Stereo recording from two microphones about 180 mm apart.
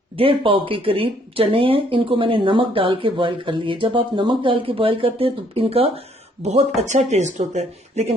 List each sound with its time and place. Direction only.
0.2 s speech: 30° right (ahead or behind)